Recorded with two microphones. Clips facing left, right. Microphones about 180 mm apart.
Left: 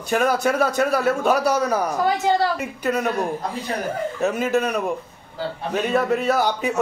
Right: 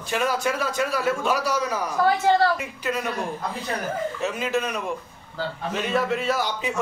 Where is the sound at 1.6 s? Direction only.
40° left (ahead or behind).